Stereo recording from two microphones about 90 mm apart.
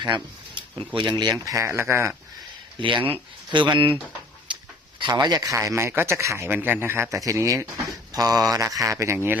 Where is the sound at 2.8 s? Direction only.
65° right (ahead or behind).